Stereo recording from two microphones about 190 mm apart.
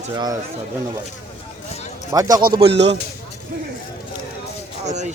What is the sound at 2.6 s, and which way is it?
Speech, 65° right (ahead or behind).